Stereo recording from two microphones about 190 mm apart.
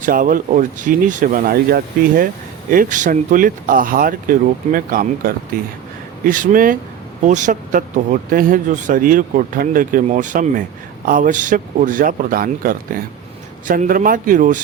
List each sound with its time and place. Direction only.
0.0 s speech: 45° right (ahead or behind)